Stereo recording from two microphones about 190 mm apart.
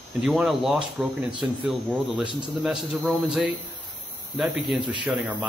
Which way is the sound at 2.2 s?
25° right (ahead or behind).